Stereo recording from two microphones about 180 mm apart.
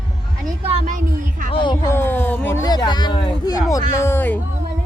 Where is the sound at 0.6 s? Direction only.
35° right (ahead or behind).